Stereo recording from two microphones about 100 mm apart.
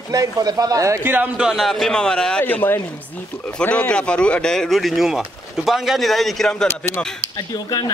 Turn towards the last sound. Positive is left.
turn(degrees=40)  # may be behind; listen again after turning